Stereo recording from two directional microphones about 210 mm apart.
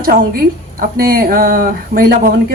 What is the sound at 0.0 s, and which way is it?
A woman's voice, 45° right (ahead or behind).